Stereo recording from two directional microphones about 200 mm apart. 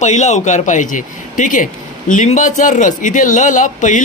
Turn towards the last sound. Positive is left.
turn(degrees=40)  # may be behind; listen again after turning